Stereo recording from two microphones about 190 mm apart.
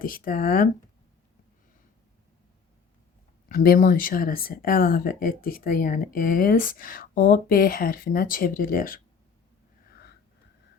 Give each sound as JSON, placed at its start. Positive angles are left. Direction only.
{"t": 0.0, "sound": "speech", "side_deg": 50}
{"t": 3.5, "sound": "speech", "side_deg": 50}
{"t": 9.9, "sound": "a sound", "side_deg": 60}